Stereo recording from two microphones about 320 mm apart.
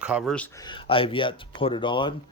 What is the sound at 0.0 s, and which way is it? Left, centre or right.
Speech, centre.